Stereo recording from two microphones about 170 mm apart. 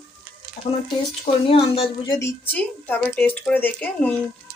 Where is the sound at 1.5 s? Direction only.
35° left (ahead or behind).